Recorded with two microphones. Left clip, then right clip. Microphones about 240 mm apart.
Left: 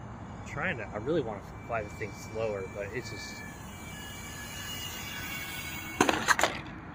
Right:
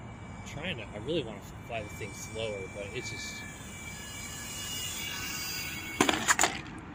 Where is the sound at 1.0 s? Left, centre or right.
Left.